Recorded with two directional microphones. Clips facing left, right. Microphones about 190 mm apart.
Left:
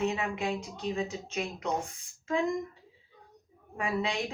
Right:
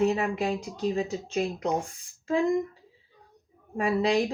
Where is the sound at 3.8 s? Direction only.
35° right (ahead or behind).